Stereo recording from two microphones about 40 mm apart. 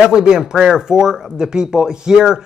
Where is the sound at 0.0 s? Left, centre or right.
Centre.